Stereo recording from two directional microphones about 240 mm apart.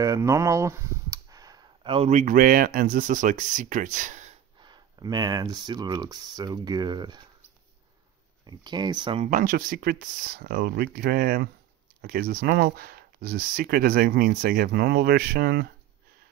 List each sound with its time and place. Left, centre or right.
0.0 s speech: centre; by 4.3 s right
4.6 s speech: centre
8.5 s speech: centre
9.3 s speech: right